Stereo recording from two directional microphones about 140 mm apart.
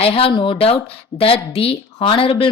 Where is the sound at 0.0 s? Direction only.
40° left (ahead or behind).